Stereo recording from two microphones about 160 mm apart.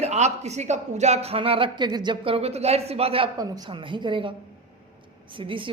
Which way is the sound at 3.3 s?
25° right (ahead or behind).